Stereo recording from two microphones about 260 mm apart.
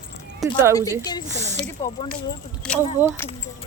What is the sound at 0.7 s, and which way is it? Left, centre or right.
Speech, centre.